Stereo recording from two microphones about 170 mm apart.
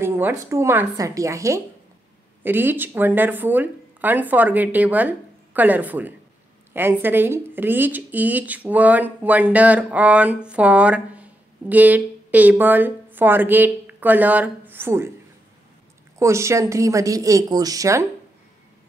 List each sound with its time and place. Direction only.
0.0 s a woman's voice: 15° right (ahead or behind)
16.2 s speech: 15° right (ahead or behind)